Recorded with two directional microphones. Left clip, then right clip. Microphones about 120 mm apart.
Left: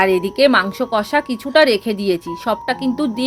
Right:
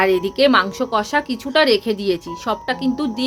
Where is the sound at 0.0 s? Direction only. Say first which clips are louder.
Left 2 dB; 30° left (ahead or behind).